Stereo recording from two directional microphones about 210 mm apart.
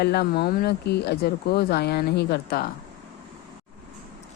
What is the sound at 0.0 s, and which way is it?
Speech, 50° left (ahead or behind).